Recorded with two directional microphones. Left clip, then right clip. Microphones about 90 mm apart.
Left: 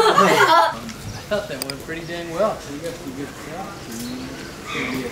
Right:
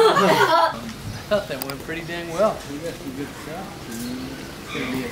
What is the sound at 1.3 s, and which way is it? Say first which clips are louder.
A woman's voice: right 1 dB; 10° right (ahead or behind).